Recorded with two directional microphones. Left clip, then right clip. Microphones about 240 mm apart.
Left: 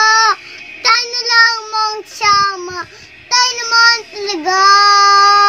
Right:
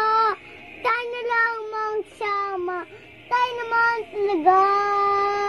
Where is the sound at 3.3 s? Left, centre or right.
Left.